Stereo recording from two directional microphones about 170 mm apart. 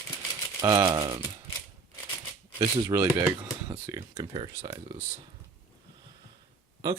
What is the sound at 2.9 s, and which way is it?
Speech, 15° right (ahead or behind).